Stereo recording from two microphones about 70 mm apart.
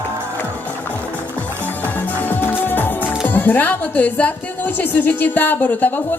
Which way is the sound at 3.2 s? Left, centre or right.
Left.